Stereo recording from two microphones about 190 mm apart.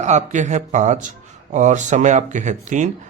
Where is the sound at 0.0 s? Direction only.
40° right (ahead or behind).